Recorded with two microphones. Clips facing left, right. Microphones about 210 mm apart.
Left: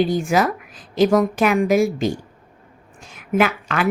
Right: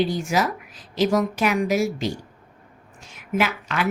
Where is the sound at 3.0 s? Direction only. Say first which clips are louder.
Left 5 dB; 50° left (ahead or behind).